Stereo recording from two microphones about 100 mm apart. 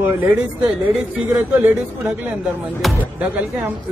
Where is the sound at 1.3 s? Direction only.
20° right (ahead or behind).